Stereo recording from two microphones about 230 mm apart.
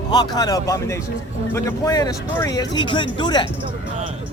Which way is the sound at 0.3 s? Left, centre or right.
Centre.